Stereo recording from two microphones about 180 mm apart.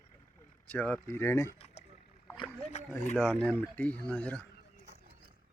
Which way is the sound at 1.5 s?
35° left (ahead or behind).